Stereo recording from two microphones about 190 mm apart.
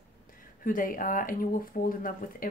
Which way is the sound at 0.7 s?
45° left (ahead or behind).